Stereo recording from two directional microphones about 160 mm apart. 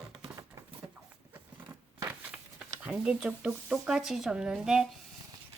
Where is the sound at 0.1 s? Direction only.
20° right (ahead or behind).